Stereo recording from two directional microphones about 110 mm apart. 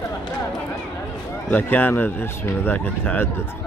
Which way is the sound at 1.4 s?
15° left (ahead or behind).